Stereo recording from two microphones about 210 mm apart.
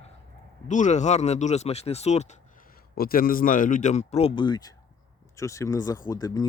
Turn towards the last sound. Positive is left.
turn(degrees=15)  # may be behind; listen again after turning